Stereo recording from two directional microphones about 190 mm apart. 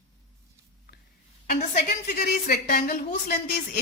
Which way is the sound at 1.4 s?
45° left (ahead or behind).